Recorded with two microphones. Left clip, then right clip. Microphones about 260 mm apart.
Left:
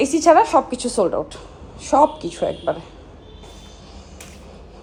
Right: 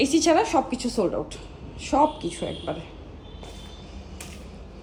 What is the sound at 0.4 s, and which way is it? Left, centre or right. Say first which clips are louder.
Speech: left 6 dB; centre.